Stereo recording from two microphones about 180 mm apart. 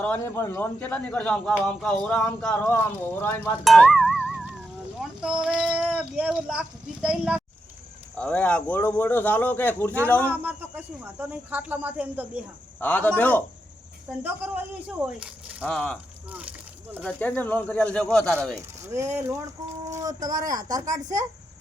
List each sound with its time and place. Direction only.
0.0 s a man's voice: 10° left (ahead or behind)
3.6 s music: centre (ahead or behind)
5.4 s speech: 5° right (ahead or behind)
8.1 s a man's voice: 5° left (ahead or behind)
10.4 s speech: 10° right (ahead or behind)
12.8 s a man's voice: 10° left (ahead or behind)
14.2 s speech: 10° right (ahead or behind)
15.6 s speech: 5° left (ahead or behind)
16.4 s a sound: 5° right (ahead or behind)
17.1 s a man's voice: 10° left (ahead or behind)
18.5 s speech: 15° right (ahead or behind)